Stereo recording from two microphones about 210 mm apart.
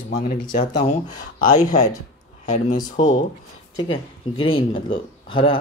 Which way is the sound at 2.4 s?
35° left (ahead or behind).